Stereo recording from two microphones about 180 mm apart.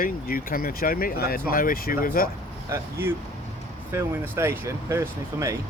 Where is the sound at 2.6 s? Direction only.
15° right (ahead or behind).